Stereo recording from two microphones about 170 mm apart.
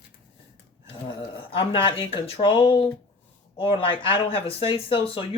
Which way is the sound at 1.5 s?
30° left (ahead or behind).